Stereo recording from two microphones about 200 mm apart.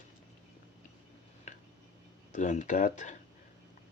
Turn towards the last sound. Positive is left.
turn(degrees=40)  # may be behind; listen again after turning